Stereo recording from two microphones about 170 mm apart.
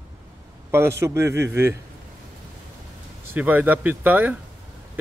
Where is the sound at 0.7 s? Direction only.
15° right (ahead or behind).